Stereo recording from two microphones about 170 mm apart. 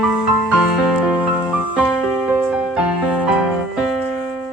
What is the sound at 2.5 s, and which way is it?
Music, 5° right (ahead or behind).